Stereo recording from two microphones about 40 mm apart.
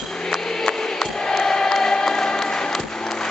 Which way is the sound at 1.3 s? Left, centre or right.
Centre.